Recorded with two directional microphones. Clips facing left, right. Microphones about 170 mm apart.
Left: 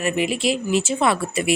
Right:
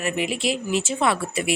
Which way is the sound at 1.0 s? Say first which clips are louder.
Left 2 dB; 40° left (ahead or behind).